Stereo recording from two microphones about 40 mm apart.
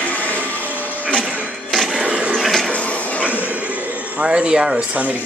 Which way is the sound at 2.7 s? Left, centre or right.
Left.